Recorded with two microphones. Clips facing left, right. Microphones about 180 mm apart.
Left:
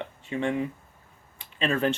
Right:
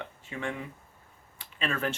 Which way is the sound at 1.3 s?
25° left (ahead or behind).